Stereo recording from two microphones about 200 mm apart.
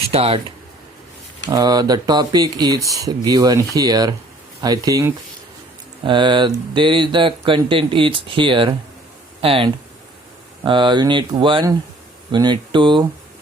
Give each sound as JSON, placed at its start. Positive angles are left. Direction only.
{"t": 0.1, "sound": "speech", "side_deg": -30}
{"t": 1.5, "sound": "speech", "side_deg": -15}